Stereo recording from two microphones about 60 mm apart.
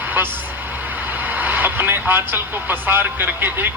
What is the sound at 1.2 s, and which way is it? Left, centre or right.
Speech, right.